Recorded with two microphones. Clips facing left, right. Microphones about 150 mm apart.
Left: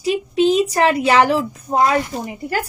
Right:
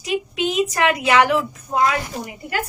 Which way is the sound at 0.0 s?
30° left (ahead or behind).